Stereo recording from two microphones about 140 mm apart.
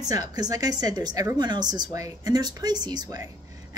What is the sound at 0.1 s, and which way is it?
A woman's voice, 30° right (ahead or behind).